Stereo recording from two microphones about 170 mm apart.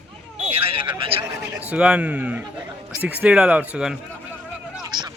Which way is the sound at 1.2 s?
10° right (ahead or behind).